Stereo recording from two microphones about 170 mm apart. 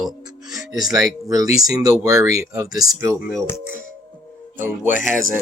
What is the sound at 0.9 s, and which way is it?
Speech, 20° right (ahead or behind).